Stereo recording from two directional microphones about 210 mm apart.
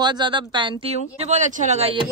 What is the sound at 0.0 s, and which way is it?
Speech, 20° right (ahead or behind).